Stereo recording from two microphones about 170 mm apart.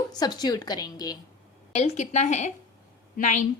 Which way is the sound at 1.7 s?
40° left (ahead or behind).